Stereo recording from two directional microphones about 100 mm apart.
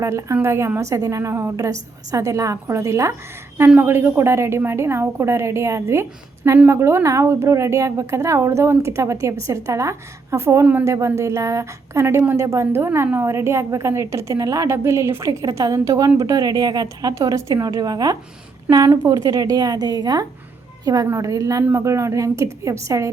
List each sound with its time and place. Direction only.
0.0 s a woman's voice: 30° right (ahead or behind)